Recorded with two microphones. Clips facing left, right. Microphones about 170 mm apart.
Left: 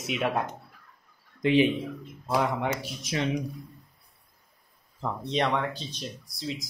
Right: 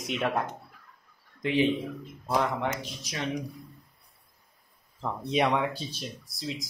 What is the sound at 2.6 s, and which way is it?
Speech, 10° left (ahead or behind).